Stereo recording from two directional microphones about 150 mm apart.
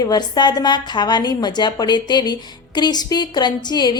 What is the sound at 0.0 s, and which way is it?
A woman's voice, 30° left (ahead or behind).